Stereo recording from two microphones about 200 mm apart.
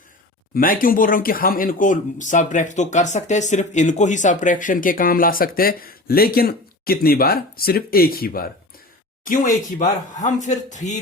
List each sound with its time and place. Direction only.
0.5 s speech: 45° left (ahead or behind)